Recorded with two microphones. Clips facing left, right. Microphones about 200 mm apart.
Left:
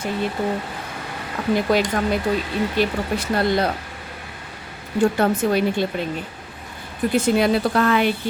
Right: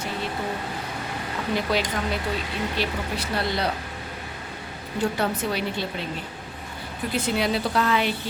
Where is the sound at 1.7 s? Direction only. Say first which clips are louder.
Left 6 dB; 50° left (ahead or behind).